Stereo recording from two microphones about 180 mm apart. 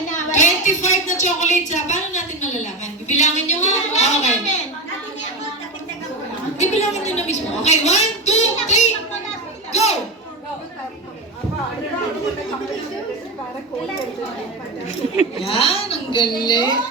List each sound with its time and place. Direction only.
0.3 s a woman's voice: 45° left (ahead or behind)
6.6 s a sound: 40° left (ahead or behind)
15.1 s a woman's voice: 35° left (ahead or behind)